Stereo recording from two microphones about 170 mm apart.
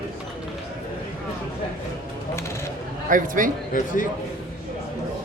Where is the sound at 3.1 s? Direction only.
50° right (ahead or behind).